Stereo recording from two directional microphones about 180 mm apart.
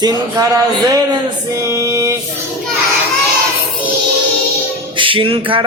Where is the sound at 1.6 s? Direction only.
15° right (ahead or behind).